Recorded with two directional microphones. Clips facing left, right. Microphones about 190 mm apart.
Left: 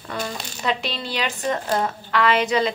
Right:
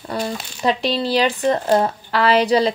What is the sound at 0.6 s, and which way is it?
Speech, 35° right (ahead or behind).